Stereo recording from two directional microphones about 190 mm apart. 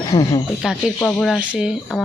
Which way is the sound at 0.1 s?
15° left (ahead or behind).